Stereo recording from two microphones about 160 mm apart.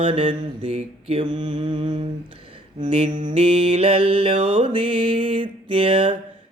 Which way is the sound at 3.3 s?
35° right (ahead or behind).